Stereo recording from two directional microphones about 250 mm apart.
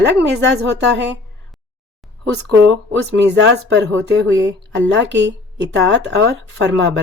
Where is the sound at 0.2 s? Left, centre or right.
Right.